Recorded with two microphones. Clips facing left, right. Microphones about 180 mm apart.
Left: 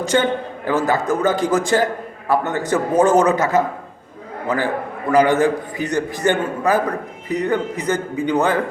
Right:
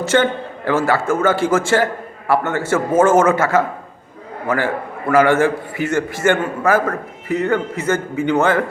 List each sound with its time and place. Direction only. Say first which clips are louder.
0.0 s a man's voice: right 1 dB; 15° left (ahead or behind)